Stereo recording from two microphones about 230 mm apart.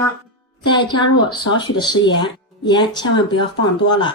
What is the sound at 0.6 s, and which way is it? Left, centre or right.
Speech, centre.